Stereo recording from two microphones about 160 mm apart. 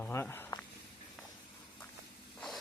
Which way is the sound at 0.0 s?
15° left (ahead or behind).